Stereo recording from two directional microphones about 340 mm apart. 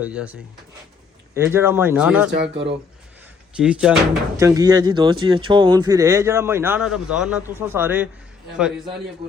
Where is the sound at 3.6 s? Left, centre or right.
Centre.